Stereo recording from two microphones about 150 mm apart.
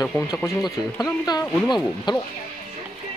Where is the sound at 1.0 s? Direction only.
20° left (ahead or behind).